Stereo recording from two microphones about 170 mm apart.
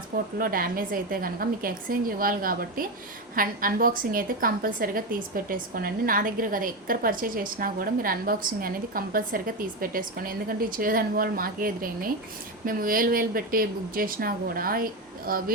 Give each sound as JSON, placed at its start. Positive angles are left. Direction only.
{"t": 0.3, "sound": "a woman's voice", "side_deg": -55}